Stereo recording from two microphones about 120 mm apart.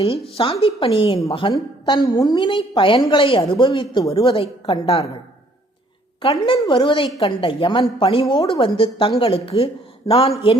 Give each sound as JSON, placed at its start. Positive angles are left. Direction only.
{"t": 0.0, "sound": "a woman's voice", "side_deg": 50}
{"t": 1.5, "sound": "a woman's voice", "side_deg": 35}
{"t": 6.4, "sound": "a woman's voice", "side_deg": 45}